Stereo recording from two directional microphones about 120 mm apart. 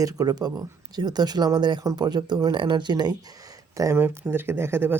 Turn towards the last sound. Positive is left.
turn(degrees=-20)  # may be behind; listen again after turning